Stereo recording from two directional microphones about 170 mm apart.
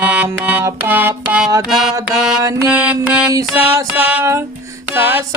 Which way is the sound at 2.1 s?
5° right (ahead or behind).